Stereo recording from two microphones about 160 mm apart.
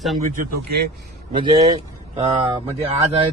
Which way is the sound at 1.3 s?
35° right (ahead or behind).